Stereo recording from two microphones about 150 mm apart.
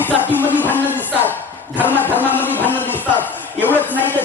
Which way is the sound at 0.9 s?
15° left (ahead or behind).